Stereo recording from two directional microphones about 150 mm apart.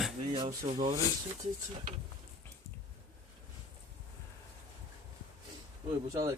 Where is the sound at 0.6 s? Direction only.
35° right (ahead or behind).